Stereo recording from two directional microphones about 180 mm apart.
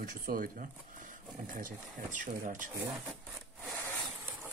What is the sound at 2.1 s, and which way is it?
Speech, 45° right (ahead or behind).